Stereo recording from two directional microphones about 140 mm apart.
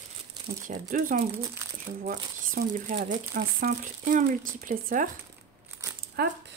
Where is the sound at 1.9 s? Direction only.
90° right.